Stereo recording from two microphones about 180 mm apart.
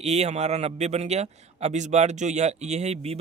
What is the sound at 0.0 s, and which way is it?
A man's voice, 35° right (ahead or behind).